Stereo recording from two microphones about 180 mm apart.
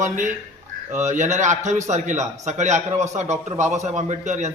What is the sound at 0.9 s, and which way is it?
A man's voice, 40° right (ahead or behind).